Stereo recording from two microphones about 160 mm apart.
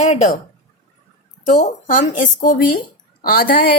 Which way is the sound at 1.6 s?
55° left (ahead or behind).